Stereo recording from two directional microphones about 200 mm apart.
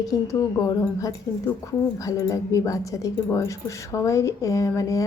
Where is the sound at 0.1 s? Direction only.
15° left (ahead or behind).